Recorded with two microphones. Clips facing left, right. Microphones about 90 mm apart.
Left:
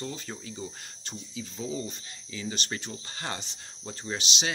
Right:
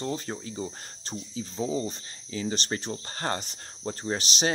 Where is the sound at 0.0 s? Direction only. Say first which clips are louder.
Right 5 dB; 40° right (ahead or behind).